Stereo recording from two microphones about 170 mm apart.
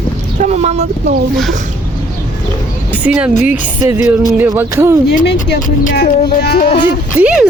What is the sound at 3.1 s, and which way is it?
Speech, 10° right (ahead or behind).